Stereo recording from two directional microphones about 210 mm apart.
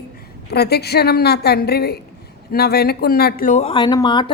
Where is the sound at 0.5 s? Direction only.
50° left (ahead or behind).